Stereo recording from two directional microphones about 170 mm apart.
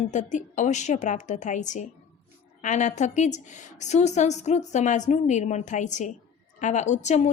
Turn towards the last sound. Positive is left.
turn(degrees=40)  # may be behind; listen again after turning